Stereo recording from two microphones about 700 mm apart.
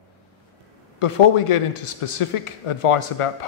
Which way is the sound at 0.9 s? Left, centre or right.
Left.